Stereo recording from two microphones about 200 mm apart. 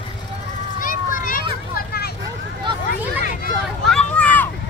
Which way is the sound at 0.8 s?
45° left (ahead or behind).